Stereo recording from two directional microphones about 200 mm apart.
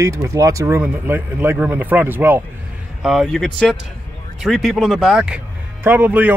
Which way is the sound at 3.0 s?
Centre (ahead or behind).